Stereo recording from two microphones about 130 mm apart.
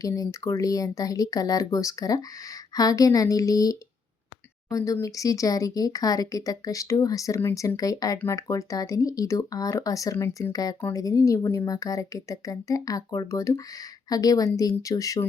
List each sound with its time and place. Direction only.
0.0 s speech: 25° left (ahead or behind)